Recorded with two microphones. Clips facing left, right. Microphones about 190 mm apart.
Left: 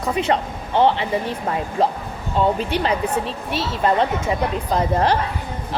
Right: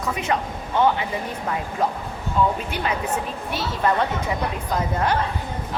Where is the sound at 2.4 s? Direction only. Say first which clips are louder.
Left 2 dB; 30° left (ahead or behind).